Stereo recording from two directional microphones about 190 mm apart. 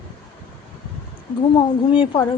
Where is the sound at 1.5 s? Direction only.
25° left (ahead or behind).